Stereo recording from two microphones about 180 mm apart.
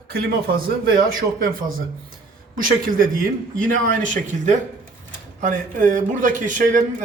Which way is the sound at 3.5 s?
50° right (ahead or behind).